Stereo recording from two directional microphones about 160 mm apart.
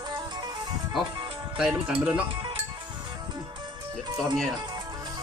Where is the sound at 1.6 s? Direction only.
5° right (ahead or behind).